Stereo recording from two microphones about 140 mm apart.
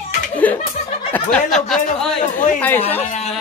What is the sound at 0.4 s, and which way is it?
Music, 10° left (ahead or behind).